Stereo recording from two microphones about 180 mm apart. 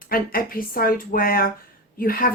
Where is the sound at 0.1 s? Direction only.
55° left (ahead or behind).